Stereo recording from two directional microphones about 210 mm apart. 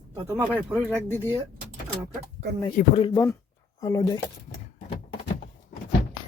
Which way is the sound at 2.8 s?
30° left (ahead or behind).